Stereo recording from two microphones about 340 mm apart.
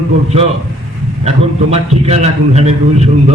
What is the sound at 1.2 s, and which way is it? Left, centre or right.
A man's voice, centre.